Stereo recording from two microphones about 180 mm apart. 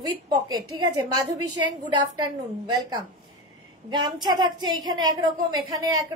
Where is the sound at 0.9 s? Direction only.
20° right (ahead or behind).